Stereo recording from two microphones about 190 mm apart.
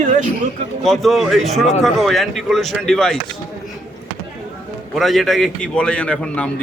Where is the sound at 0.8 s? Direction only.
Centre (ahead or behind).